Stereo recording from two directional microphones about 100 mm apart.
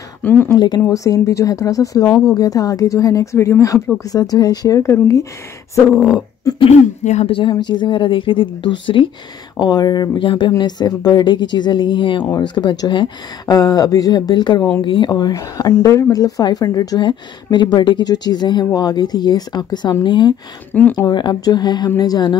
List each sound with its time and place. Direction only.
0.2 s speech: 20° left (ahead or behind)
0.6 s speech: 45° left (ahead or behind)
0.8 s a woman's voice: 35° left (ahead or behind)
6.5 s a woman's voice: 35° left (ahead or behind)
7.2 s speech: 65° left (ahead or behind)
7.5 s speech: 45° left (ahead or behind)
9.6 s speech: 45° left (ahead or behind)
13.6 s a woman's voice: 35° left (ahead or behind); by 15.0 s 55° left (ahead or behind)
15.0 s a woman's voice: 40° left (ahead or behind)
17.0 s speech: 50° left (ahead or behind)
20.7 s speech: 15° left (ahead or behind)
21.1 s speech: 45° left (ahead or behind)